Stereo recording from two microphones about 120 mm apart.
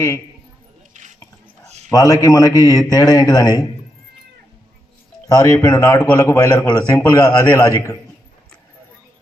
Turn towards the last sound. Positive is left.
turn(degrees=25)  # may be behind; listen again after turning